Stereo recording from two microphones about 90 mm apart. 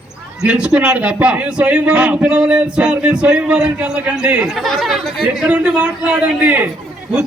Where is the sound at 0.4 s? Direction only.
10° right (ahead or behind).